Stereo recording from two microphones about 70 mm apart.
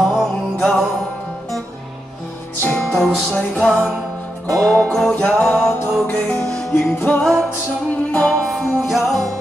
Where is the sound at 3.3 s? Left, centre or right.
Centre.